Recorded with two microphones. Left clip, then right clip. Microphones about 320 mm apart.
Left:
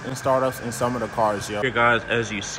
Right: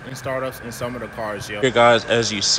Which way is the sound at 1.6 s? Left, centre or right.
Centre.